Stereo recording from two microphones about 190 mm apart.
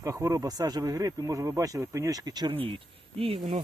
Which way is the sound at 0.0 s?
15° right (ahead or behind).